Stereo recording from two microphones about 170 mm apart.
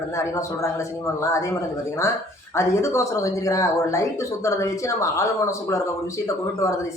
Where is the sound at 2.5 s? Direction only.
15° left (ahead or behind).